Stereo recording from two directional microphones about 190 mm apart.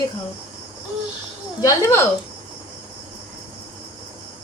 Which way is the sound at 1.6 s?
15° left (ahead or behind).